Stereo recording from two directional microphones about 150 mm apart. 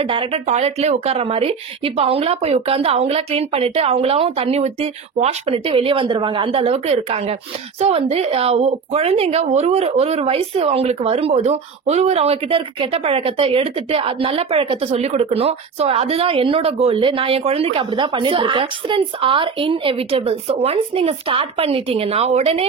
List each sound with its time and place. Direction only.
0.1 s a woman's voice: 45° right (ahead or behind)